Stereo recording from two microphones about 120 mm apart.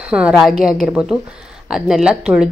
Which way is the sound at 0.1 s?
5° right (ahead or behind).